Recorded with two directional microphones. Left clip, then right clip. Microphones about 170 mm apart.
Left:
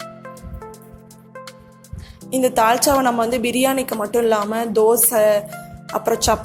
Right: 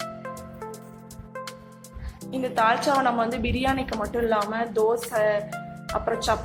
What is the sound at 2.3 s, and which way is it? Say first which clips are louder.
Speech: left 7 dB; 50° left (ahead or behind).